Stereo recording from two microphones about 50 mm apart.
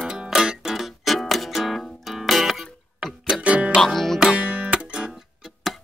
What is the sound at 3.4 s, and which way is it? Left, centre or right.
Music, right.